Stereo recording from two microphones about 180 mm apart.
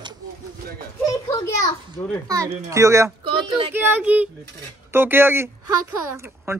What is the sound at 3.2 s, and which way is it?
Speech, 30° right (ahead or behind).